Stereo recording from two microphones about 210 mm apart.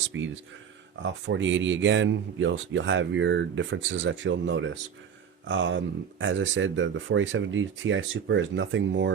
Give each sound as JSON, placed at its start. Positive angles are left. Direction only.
{"t": 0.1, "sound": "speech", "side_deg": -60}